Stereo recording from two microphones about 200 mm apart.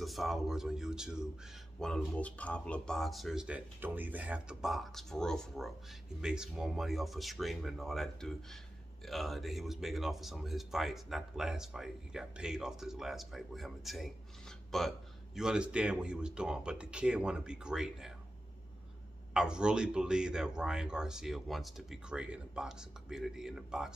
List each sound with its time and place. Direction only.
0.0 s speech: centre (ahead or behind)
19.3 s speech: 5° right (ahead or behind)